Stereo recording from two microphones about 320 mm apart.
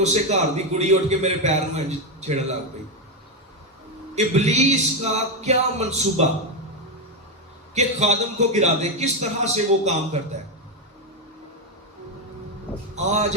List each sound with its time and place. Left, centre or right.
0.0 s a man's voice: right
4.1 s a man's voice: right
7.7 s a man's voice: right
13.0 s a man's voice: right